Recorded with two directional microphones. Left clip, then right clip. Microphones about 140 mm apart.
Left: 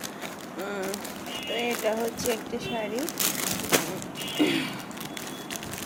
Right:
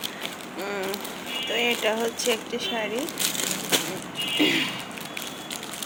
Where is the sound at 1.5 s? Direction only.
Centre (ahead or behind).